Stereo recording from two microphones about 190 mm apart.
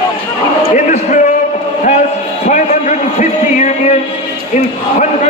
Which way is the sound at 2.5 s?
40° left (ahead or behind).